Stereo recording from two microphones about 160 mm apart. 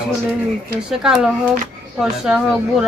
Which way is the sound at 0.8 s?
5° right (ahead or behind).